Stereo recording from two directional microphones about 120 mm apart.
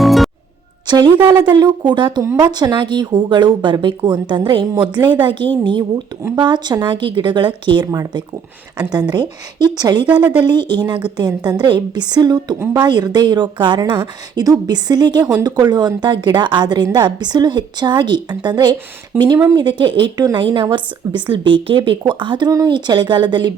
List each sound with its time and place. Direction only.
0.0 s music: centre (ahead or behind)
0.9 s a woman's voice: 40° right (ahead or behind)
10.2 s a woman's voice: 10° right (ahead or behind)
10.4 s a woman's voice: 40° right (ahead or behind)
19.1 s a woman's voice: 15° right (ahead or behind)
19.5 s a woman's voice: 40° right (ahead or behind)